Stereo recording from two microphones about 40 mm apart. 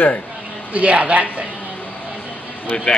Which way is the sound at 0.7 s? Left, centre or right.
Right.